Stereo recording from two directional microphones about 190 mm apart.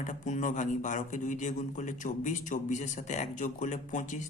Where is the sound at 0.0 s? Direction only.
40° left (ahead or behind).